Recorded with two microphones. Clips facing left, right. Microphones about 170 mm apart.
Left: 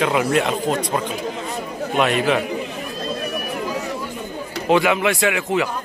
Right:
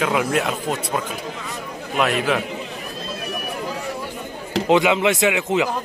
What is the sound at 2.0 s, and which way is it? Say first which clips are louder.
Speech: left 2 dB; centre (ahead or behind).